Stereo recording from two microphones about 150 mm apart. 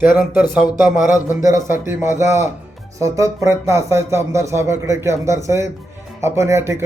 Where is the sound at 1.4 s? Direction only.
55° left (ahead or behind).